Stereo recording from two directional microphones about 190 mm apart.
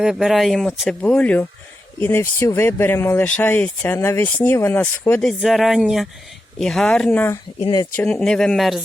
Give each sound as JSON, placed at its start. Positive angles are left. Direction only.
{"t": 0.0, "sound": "speech", "side_deg": -5}
{"t": 5.4, "sound": "speech", "side_deg": 0}
{"t": 7.6, "sound": "speech", "side_deg": 25}
{"t": 7.9, "sound": "speech", "side_deg": 5}